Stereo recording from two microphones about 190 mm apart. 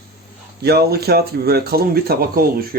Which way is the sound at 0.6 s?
55° right (ahead or behind).